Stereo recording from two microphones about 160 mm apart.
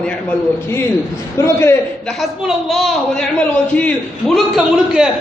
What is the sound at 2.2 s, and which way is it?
A man's voice, centre (ahead or behind).